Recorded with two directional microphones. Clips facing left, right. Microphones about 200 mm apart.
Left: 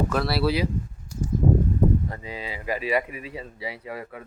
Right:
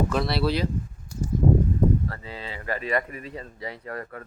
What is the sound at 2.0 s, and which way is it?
Speech, 15° left (ahead or behind).